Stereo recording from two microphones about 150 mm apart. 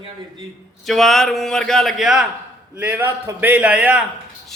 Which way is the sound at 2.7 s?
10° right (ahead or behind).